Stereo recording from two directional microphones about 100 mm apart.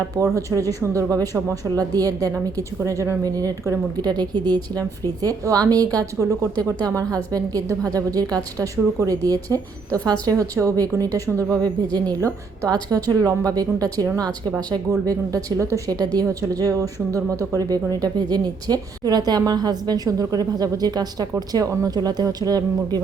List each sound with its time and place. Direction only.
0.3 s a woman's voice: 35° right (ahead or behind)
5.2 s a woman's voice: 35° right (ahead or behind)